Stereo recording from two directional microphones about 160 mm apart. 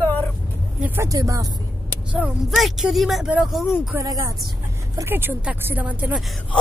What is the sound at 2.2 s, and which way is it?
Speech, centre (ahead or behind).